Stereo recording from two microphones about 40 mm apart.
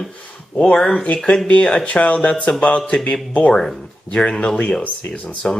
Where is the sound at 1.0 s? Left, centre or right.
Left.